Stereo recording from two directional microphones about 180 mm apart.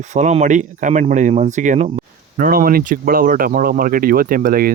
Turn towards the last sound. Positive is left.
turn(degrees=-55)  # may be behind; listen again after turning